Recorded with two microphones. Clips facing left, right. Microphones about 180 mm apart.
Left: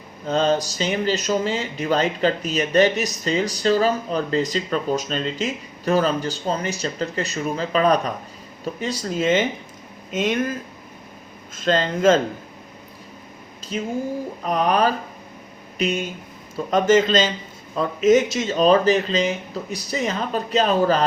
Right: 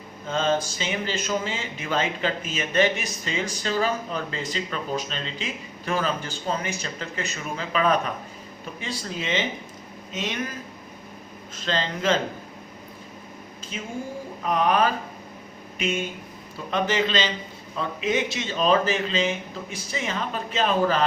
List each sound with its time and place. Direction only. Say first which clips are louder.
0.3 s speech: left 4 dB; 40° left (ahead or behind)
11.5 s speech: left 7 dB; 50° left (ahead or behind)
14.4 s speech: left 2 dB; 40° left (ahead or behind)